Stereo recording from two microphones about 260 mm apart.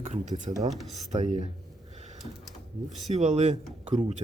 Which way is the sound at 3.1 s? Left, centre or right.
Right.